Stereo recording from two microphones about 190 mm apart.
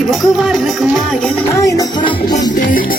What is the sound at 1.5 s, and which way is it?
Music, 20° left (ahead or behind).